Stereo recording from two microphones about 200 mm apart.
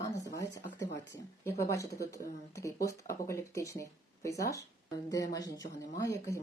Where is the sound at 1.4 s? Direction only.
15° left (ahead or behind).